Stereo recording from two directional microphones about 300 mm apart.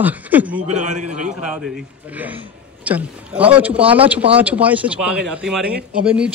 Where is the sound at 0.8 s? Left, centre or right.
Right.